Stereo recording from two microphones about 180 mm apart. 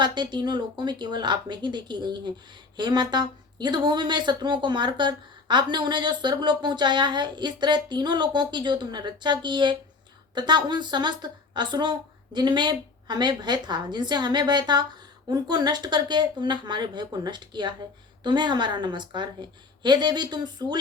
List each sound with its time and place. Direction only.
0.0 s a woman's voice: 25° right (ahead or behind)